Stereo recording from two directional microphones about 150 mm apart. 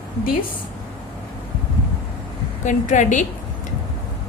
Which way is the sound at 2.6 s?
55° left (ahead or behind).